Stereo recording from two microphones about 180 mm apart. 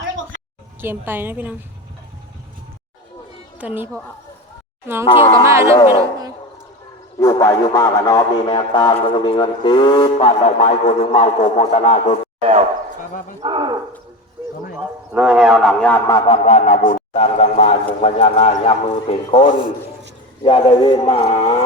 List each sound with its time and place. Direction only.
0.8 s a woman's voice: 10° right (ahead or behind)
3.6 s a woman's voice: 10° right (ahead or behind)
5.0 s a man's voice: 30° left (ahead or behind)
5.4 s a woman's voice: 15° right (ahead or behind)
7.2 s a man's voice: 15° left (ahead or behind); by 12.1 s 40° left (ahead or behind)
12.4 s speech: 35° right (ahead or behind)
15.1 s a man's voice: 5° right (ahead or behind)
16.0 s speech: 25° left (ahead or behind); by 17.0 s 45° left (ahead or behind)
17.2 s a man's voice: 35° left (ahead or behind)